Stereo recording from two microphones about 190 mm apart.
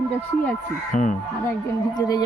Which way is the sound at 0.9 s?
40° left (ahead or behind).